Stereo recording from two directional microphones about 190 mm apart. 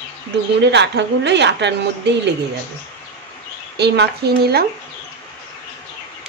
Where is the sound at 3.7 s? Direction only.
60° right (ahead or behind).